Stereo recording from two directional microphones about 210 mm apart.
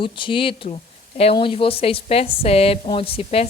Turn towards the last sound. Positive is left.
turn(degrees=30)  # may be behind; listen again after turning